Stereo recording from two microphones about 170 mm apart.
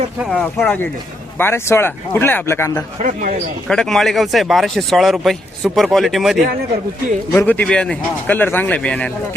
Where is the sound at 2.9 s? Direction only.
50° right (ahead or behind).